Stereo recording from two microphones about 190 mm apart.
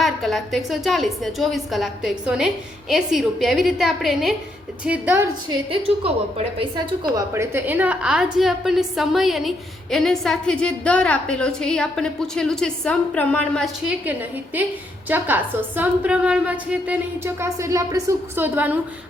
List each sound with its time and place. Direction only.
0.0 s a woman's voice: centre (ahead or behind)
5.7 s a woman's voice: 30° right (ahead or behind)
7.2 s a woman's voice: 15° right (ahead or behind); by 13.7 s 5° left (ahead or behind)
13.8 s a woman's voice: 10° right (ahead or behind)